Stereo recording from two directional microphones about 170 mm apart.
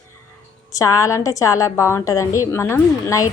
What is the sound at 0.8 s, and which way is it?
A woman's voice, 20° left (ahead or behind).